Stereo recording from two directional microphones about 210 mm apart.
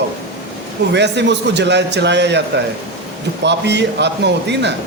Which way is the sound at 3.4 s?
55° right (ahead or behind).